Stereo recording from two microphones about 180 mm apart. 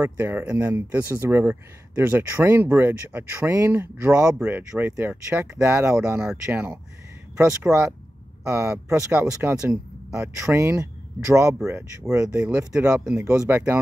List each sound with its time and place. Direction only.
0.0 s speech: 10° right (ahead or behind)
8.5 s speech: 15° right (ahead or behind)
8.9 s speech: 5° right (ahead or behind)